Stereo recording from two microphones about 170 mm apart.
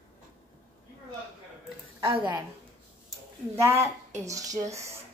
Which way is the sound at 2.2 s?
25° right (ahead or behind).